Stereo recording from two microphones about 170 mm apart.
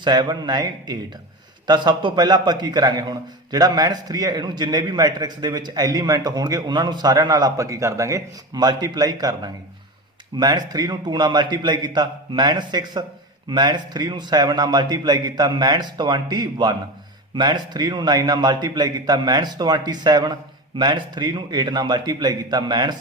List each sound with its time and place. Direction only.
0.0 s a man's voice: 25° right (ahead or behind)